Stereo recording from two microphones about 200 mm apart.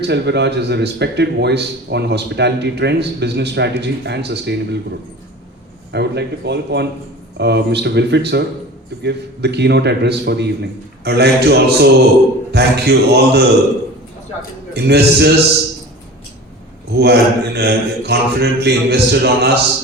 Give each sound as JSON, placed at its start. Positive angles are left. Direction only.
{"t": 0.0, "sound": "speech", "side_deg": -55}
{"t": 5.9, "sound": "speech", "side_deg": -55}
{"t": 14.7, "sound": "speech", "side_deg": -55}
{"t": 17.0, "sound": "speech", "side_deg": -55}